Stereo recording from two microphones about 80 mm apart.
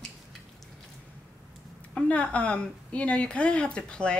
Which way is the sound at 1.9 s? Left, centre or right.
Centre.